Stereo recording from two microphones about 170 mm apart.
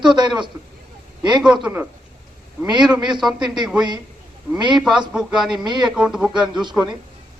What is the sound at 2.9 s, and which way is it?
Speech, 25° right (ahead or behind).